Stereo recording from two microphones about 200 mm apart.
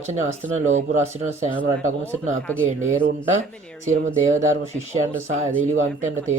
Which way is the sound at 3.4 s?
35° right (ahead or behind).